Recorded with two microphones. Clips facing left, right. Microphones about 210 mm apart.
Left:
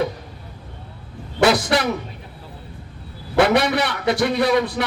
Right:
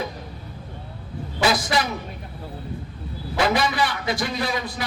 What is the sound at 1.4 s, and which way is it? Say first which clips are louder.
Speech: left 5 dB; 65° left (ahead or behind).